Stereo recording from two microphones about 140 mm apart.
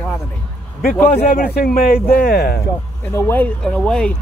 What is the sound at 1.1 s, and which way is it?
A man's voice, 85° left.